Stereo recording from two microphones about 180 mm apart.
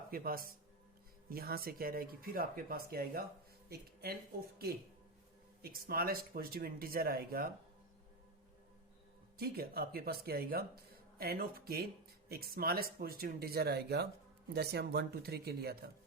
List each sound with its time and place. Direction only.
0.1 s speech: 55° right (ahead or behind)
9.4 s speech: 55° right (ahead or behind)